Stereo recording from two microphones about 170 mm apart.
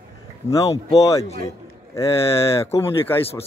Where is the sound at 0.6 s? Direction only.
35° left (ahead or behind).